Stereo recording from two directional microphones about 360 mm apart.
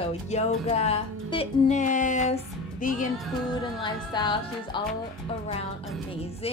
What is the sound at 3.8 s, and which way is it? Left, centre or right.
Speech, centre.